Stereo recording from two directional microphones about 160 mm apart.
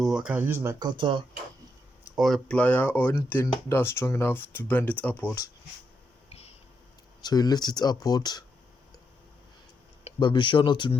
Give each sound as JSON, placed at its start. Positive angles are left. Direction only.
{"t": 0.0, "sound": "speech", "side_deg": -5}
{"t": 2.1, "sound": "speech", "side_deg": 0}
{"t": 7.2, "sound": "speech", "side_deg": 25}
{"t": 10.2, "sound": "speech", "side_deg": 30}